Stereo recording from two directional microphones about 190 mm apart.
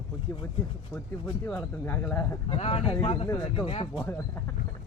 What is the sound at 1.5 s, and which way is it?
Speech, 10° left (ahead or behind).